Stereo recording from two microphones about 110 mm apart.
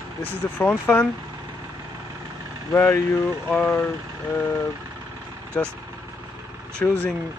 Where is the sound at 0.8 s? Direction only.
20° left (ahead or behind).